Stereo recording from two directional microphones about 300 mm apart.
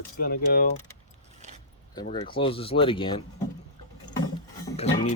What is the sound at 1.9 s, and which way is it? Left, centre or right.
Speech, centre.